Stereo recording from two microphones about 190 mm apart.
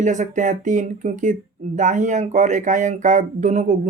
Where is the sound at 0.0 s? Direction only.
40° right (ahead or behind).